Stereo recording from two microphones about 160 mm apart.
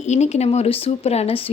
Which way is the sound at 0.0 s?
45° left (ahead or behind).